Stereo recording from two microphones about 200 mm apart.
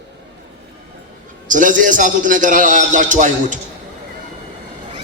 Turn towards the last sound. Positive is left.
turn(degrees=-40)  # may be behind; listen again after turning